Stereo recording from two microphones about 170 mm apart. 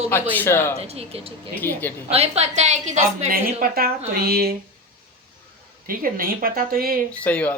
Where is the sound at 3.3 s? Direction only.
60° right (ahead or behind).